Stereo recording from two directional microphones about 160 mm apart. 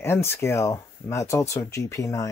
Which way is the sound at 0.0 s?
15° left (ahead or behind).